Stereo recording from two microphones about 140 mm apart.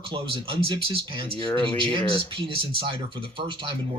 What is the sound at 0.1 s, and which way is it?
Speech, 35° right (ahead or behind).